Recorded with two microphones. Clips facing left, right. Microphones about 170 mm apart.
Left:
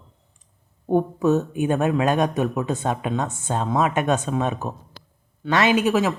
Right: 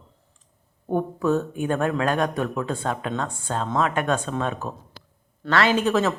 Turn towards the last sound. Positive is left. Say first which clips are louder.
# left 1 dB
turn(degrees=10)  # may be behind; listen again after turning